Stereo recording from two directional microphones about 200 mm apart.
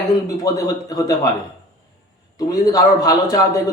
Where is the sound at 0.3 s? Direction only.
20° left (ahead or behind).